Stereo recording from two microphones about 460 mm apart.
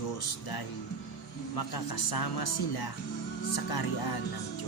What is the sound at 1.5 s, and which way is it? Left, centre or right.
Speech, left.